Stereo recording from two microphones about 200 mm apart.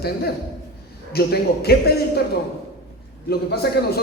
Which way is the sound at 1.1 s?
50° left (ahead or behind).